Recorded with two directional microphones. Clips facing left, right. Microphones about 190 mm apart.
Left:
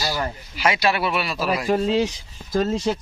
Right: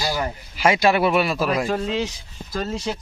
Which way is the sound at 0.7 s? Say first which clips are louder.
Right 7 dB; 45° right (ahead or behind).